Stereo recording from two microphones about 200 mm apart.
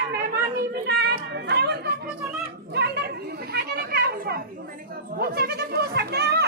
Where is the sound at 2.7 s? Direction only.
55° right (ahead or behind).